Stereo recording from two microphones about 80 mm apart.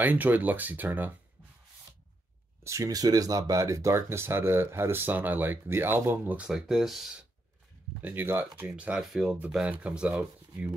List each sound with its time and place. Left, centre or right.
0.0 s speech: right
2.6 s speech: right
6.4 s speech: centre
8.0 s speech: right
8.7 s speech: centre